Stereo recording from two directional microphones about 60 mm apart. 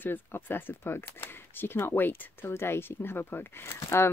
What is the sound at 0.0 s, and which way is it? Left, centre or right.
Speech, left.